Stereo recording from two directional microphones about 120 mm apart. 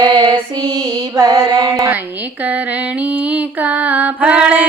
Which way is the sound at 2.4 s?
10° right (ahead or behind).